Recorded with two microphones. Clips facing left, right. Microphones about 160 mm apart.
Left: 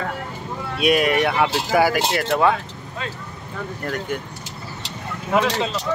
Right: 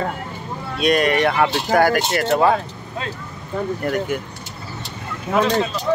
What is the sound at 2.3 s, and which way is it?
Speech, 35° right (ahead or behind).